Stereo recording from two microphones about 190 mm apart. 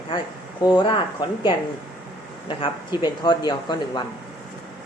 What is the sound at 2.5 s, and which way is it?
Speech, 25° left (ahead or behind).